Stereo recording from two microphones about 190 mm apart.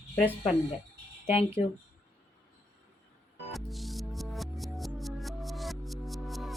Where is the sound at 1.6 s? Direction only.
40° left (ahead or behind).